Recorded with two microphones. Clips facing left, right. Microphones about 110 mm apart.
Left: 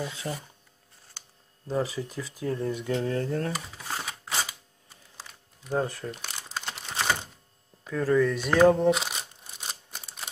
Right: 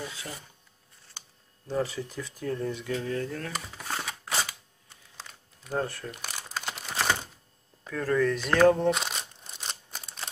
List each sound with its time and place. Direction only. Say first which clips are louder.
0.1 s speech: left 6 dB; 30° left (ahead or behind)
1.7 s speech: left 1 dB; 15° left (ahead or behind)
2.7 s speech: left 3 dB; 25° left (ahead or behind)
3.8 s a sound: right 2 dB; 5° left (ahead or behind)
5.1 s typing: right 1 dB; 5° left (ahead or behind)
5.9 s speech: left 3 dB; 10° left (ahead or behind)
6.2 s crumpling: right 1 dB; 5° right (ahead or behind)
7.8 s crumpling: left 2 dB; 10° left (ahead or behind)